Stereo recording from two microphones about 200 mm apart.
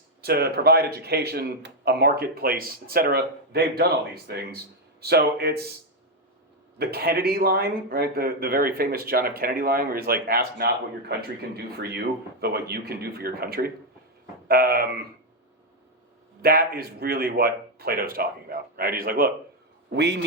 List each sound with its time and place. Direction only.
0.2 s speech: 50° right (ahead or behind)
6.7 s speech: 50° right (ahead or behind)
16.4 s speech: 50° right (ahead or behind)